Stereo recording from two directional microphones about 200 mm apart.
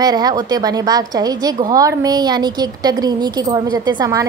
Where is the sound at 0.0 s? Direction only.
20° right (ahead or behind).